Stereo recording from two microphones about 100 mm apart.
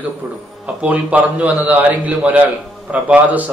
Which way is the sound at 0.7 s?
15° right (ahead or behind).